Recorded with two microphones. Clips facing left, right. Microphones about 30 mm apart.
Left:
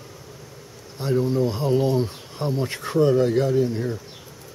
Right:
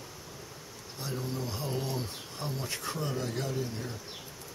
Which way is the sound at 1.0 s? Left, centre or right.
Left.